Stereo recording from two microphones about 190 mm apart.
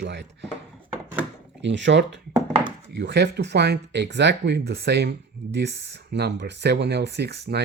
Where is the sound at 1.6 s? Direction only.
70° right (ahead or behind).